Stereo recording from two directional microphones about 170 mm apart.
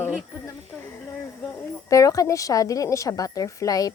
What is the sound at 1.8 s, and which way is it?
A woman's voice, 20° left (ahead or behind).